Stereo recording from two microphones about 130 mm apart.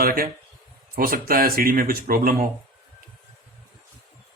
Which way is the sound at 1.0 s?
90° right.